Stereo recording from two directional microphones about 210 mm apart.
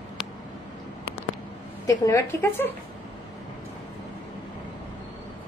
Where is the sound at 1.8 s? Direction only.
15° left (ahead or behind).